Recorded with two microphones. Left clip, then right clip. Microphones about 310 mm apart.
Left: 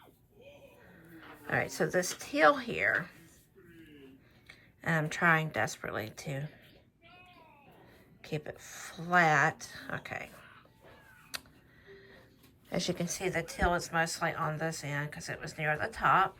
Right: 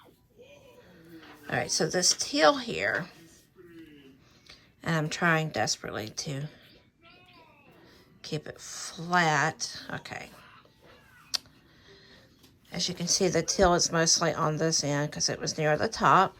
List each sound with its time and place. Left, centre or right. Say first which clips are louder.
1.1 s speech: right 1 dB; centre
4.4 s speech: right 1 dB; centre
8.2 s speech: right 3 dB; centre
11.3 s a sound: right 10 dB; centre
12.7 s a woman's voice: right 5 dB; centre